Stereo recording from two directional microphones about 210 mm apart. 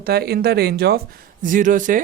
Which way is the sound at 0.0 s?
50° right (ahead or behind).